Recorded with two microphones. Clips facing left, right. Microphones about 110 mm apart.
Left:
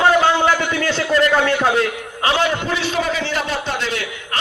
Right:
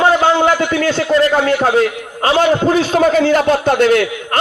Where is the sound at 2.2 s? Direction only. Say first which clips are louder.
Right 6 dB; 45° right (ahead or behind).